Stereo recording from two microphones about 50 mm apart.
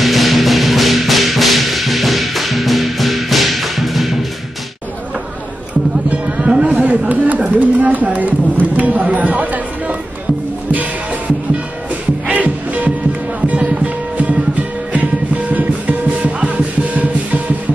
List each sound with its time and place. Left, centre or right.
0.0 s music: centre
6.1 s music: right
6.7 s a sound: right
8.6 s speech: right
12.3 s music: right